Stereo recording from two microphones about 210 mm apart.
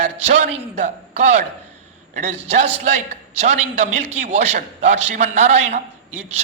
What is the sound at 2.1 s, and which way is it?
A man's voice, 30° right (ahead or behind).